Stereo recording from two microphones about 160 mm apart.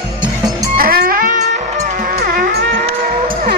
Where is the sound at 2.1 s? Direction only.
70° right (ahead or behind).